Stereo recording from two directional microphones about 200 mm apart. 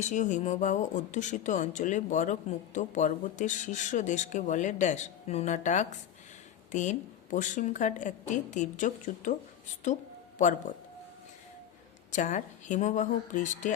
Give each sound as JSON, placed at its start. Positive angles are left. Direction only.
{"t": 0.0, "sound": "speech", "side_deg": 35}
{"t": 12.1, "sound": "speech", "side_deg": 40}